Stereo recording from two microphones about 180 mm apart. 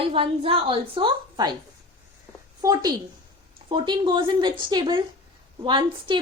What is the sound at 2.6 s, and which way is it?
Speech, 20° right (ahead or behind).